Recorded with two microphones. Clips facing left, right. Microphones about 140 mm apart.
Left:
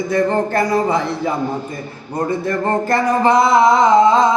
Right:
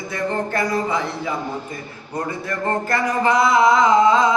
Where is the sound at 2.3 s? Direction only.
30° left (ahead or behind).